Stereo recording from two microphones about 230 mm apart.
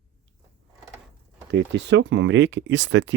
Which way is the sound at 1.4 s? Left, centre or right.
Right.